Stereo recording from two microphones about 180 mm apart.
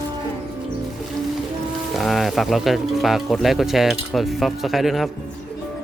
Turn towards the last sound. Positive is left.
turn(degrees=0)  # may be behind; listen again after turning